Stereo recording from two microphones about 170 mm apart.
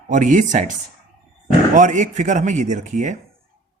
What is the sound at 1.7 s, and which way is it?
Speech, 45° right (ahead or behind).